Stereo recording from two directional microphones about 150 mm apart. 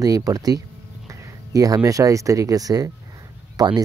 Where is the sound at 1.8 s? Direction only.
20° right (ahead or behind).